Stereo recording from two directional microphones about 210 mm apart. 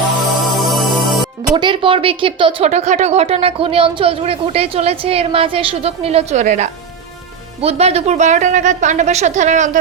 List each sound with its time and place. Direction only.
0.5 s music: centre (ahead or behind)
1.5 s a woman's voice: 25° right (ahead or behind)